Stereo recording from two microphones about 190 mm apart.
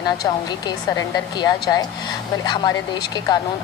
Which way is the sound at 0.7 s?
20° left (ahead or behind).